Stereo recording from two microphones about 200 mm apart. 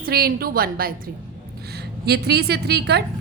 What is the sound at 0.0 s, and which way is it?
A woman's voice, 50° right (ahead or behind).